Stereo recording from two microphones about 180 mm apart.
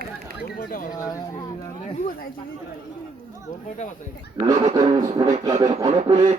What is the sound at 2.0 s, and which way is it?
Speech, 50° left (ahead or behind).